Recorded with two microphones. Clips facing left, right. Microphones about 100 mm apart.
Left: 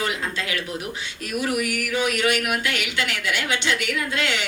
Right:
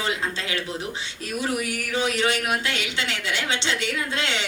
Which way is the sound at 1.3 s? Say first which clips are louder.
Left 2 dB; 30° right (ahead or behind).